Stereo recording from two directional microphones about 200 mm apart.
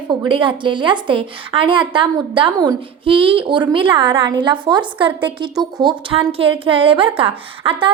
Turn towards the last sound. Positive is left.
turn(degrees=-25)  # may be behind; listen again after turning